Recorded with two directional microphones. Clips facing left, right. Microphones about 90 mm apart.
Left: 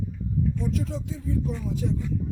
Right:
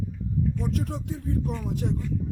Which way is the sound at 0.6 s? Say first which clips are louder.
Left 1 dB; 60° right (ahead or behind).